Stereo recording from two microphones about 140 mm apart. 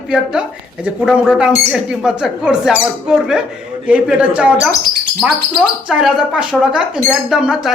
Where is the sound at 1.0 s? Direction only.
5° right (ahead or behind).